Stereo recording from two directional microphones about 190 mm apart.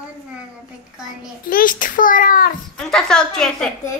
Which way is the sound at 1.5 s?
45° left (ahead or behind).